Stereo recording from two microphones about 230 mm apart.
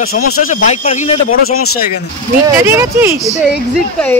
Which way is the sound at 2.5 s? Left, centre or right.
Centre.